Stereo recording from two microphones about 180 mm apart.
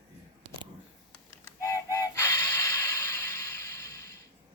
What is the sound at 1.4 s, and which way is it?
Music, 15° left (ahead or behind).